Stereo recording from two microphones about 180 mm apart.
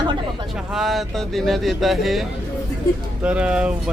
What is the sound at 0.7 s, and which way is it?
Speech, centre (ahead or behind).